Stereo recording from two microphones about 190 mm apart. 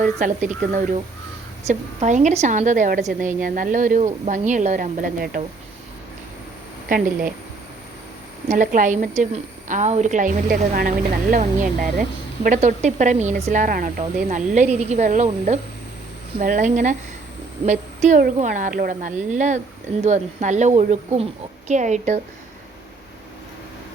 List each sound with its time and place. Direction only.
0.0 s a woman's voice: 40° right (ahead or behind)
6.8 s speech: 45° right (ahead or behind)
8.4 s a woman's voice: 45° right (ahead or behind)